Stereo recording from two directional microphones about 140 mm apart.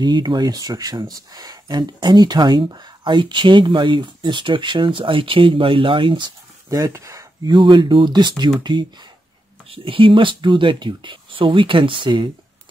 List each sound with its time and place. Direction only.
0.0 s speech: 30° right (ahead or behind)
7.5 s speech: 35° right (ahead or behind)